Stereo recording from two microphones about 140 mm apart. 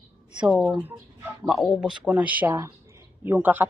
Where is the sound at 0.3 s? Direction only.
5° right (ahead or behind).